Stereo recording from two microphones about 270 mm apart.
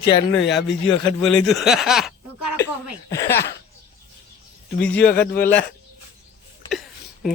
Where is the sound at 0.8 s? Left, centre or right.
Centre.